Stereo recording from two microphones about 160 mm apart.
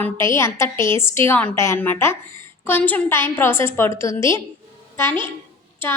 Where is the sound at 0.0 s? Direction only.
15° left (ahead or behind).